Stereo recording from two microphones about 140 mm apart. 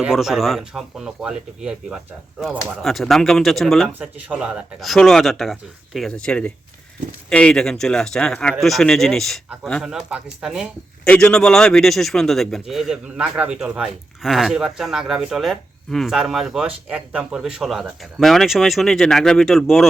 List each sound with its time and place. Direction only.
0.0 s a man's voice: 5° right (ahead or behind)
11.1 s a man's voice: 5° left (ahead or behind)